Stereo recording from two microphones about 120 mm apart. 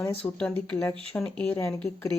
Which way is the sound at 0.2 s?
10° left (ahead or behind).